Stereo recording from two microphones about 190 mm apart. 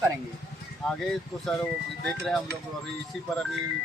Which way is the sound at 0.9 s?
Centre (ahead or behind).